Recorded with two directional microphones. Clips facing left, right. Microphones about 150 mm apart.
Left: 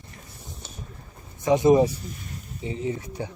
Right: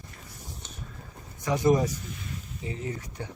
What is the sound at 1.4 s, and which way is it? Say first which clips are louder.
Speech: left 6 dB; 25° left (ahead or behind).